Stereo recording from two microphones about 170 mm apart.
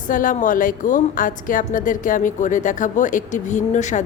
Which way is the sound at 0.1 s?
50° left (ahead or behind).